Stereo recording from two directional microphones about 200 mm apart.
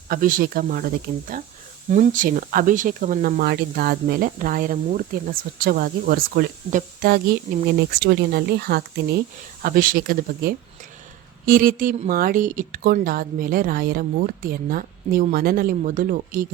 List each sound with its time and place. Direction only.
0.1 s speech: 45° right (ahead or behind)
1.9 s speech: 40° right (ahead or behind)